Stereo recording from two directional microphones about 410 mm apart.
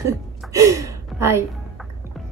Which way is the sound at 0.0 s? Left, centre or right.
Centre.